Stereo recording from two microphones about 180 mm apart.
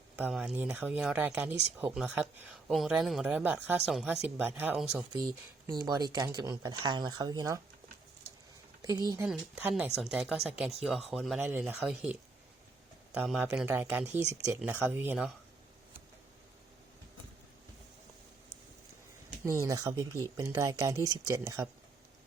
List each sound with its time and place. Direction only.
0.2 s speech: 5° right (ahead or behind)
5.6 s speech: 20° right (ahead or behind)
8.8 s speech: 20° right (ahead or behind)
9.2 s speech: 5° right (ahead or behind)
13.1 s speech: 5° right (ahead or behind)
19.5 s speech: 15° right (ahead or behind)